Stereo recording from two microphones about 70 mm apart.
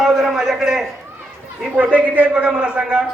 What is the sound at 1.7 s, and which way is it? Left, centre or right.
A man's voice, right.